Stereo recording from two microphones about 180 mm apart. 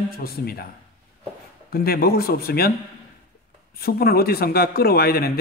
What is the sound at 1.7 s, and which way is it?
Speech, 55° left (ahead or behind).